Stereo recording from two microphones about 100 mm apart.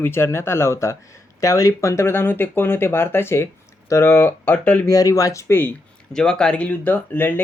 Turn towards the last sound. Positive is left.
turn(degrees=20)  # may be behind; listen again after turning